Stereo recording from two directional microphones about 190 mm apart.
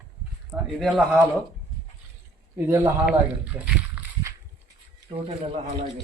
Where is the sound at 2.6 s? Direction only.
10° right (ahead or behind).